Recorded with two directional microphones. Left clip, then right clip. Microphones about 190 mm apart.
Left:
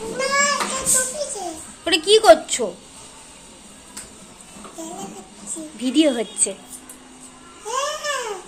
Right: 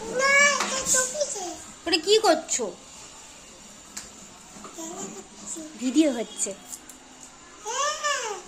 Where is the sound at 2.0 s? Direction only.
Centre (ahead or behind).